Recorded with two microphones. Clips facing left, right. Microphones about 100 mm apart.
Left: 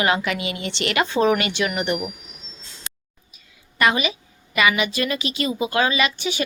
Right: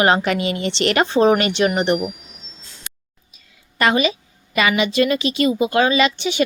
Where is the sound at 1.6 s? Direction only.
40° right (ahead or behind).